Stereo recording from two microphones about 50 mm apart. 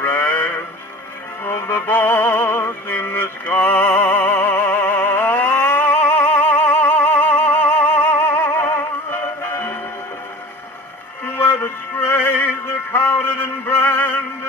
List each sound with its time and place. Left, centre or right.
0.0 s music: left
11.3 s music: left